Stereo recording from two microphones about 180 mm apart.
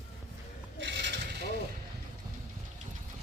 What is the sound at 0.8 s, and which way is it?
Pulleys, 80° right.